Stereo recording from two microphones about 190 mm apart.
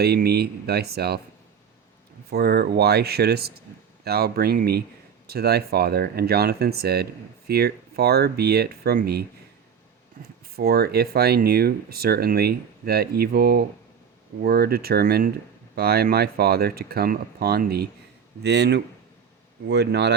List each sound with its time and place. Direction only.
0.0 s speech: 55° right (ahead or behind)
2.3 s speech: 55° right (ahead or behind)
10.2 s speech: 45° right (ahead or behind); by 20.1 s 65° right (ahead or behind)